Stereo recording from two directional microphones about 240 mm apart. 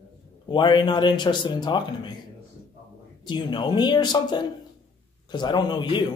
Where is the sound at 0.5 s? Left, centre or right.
Centre.